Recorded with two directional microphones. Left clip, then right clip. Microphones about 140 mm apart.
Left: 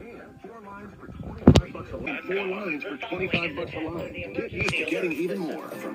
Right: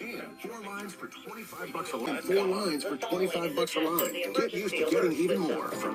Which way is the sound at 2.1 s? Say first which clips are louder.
Right 1 dB; 40° right (ahead or behind).